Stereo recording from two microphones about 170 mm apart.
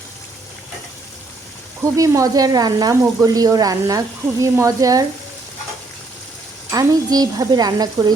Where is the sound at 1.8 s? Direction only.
20° right (ahead or behind).